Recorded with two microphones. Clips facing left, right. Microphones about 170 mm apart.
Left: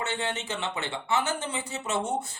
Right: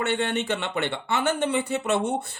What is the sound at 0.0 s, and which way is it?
Speech, 60° right (ahead or behind).